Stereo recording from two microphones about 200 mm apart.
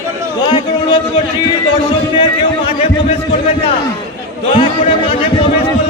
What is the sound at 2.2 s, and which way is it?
A man's voice, 25° left (ahead or behind).